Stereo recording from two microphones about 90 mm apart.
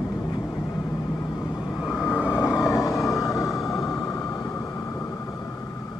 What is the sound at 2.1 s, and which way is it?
Vehicle, 10° right (ahead or behind).